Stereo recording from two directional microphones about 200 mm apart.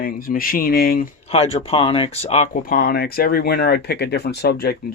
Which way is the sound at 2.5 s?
45° left (ahead or behind).